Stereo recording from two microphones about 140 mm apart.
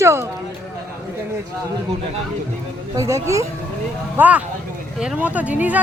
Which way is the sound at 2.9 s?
20° right (ahead or behind).